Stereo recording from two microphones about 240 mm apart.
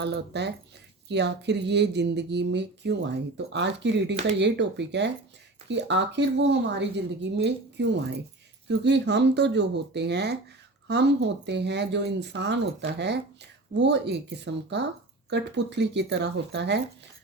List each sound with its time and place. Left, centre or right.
0.0 s speech: right